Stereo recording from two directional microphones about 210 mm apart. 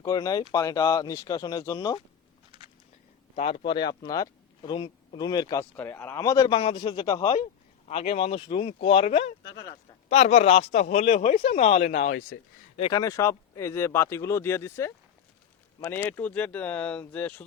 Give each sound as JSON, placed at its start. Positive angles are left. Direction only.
{"t": 0.0, "sound": "speech", "side_deg": 15}
{"t": 3.6, "sound": "speech", "side_deg": 20}
{"t": 9.5, "sound": "speech", "side_deg": 20}
{"t": 10.1, "sound": "speech", "side_deg": 35}
{"t": 12.7, "sound": "speech", "side_deg": 20}